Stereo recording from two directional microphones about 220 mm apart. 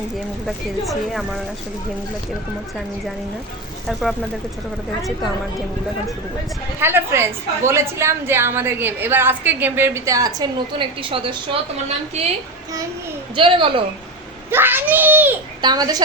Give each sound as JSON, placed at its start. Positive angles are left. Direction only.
{"t": 0.4, "sound": "a woman's voice", "side_deg": 0}
{"t": 6.7, "sound": "a woman's voice", "side_deg": -10}
{"t": 13.3, "sound": "a woman's voice", "side_deg": -25}
{"t": 14.5, "sound": "a woman's voice", "side_deg": -10}